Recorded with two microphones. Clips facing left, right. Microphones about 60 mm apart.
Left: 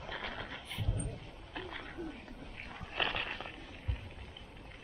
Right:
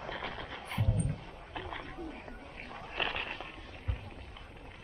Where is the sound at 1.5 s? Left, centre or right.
Centre.